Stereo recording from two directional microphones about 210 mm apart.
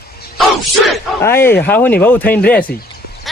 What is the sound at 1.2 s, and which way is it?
Speech, 10° left (ahead or behind).